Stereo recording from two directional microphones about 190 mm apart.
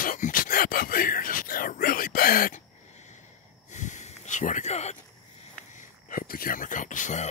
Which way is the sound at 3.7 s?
40° left (ahead or behind).